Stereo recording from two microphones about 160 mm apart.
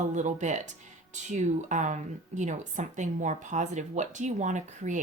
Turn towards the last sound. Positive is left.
turn(degrees=-50)  # may be behind; listen again after turning